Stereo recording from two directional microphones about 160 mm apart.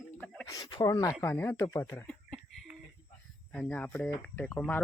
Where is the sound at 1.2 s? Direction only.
15° left (ahead or behind).